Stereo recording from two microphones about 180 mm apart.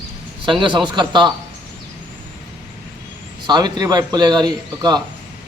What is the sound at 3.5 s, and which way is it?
A man's voice, 25° right (ahead or behind).